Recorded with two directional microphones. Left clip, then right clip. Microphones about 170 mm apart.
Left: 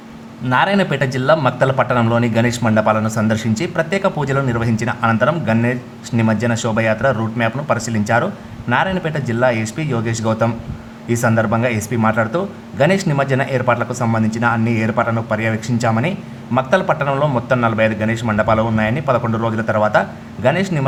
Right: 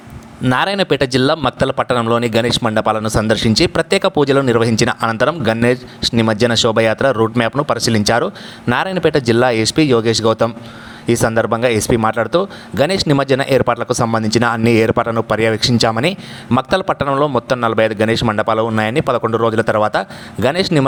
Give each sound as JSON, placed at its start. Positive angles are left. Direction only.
{"t": 0.5, "sound": "a man's voice", "side_deg": -45}